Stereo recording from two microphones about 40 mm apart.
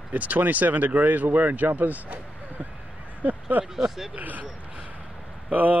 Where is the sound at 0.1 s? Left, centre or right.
Right.